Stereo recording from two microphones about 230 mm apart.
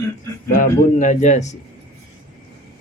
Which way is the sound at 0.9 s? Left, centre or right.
Left.